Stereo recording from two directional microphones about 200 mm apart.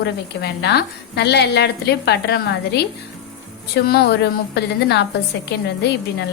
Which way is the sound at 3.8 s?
55° left (ahead or behind).